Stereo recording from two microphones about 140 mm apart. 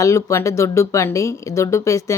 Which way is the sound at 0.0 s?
20° left (ahead or behind).